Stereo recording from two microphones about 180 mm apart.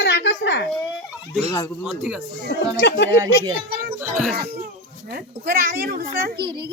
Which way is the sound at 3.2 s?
25° right (ahead or behind).